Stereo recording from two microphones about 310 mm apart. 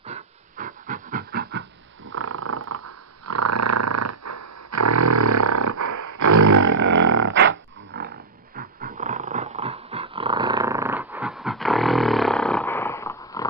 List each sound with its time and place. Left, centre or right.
0.0 s pant: right
2.0 s purr: right
7.3 s dog: right
7.9 s roaring cats: right
8.5 s dog: right; by 13.5 s centre